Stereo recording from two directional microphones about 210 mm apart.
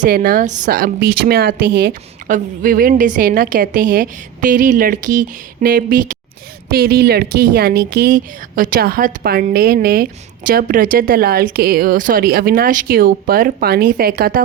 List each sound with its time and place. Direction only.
0.0 s a woman's voice: 40° right (ahead or behind)